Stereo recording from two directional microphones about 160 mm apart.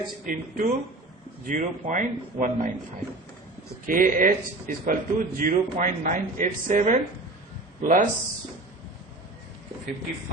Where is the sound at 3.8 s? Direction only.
60° right (ahead or behind).